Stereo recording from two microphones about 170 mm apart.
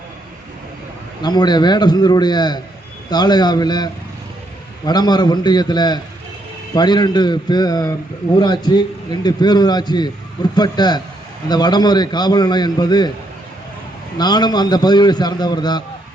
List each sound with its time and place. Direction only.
1.2 s a man's voice: 25° left (ahead or behind)
4.9 s a man's voice: 25° left (ahead or behind)
14.2 s a man's voice: 25° left (ahead or behind)